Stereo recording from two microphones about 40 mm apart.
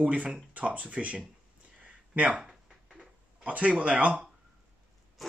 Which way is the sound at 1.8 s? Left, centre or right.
Right.